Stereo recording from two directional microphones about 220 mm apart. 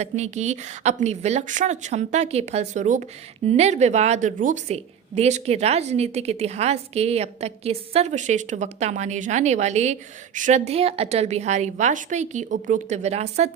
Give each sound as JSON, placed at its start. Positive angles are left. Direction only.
{"t": 0.0, "sound": "a woman's voice", "side_deg": -30}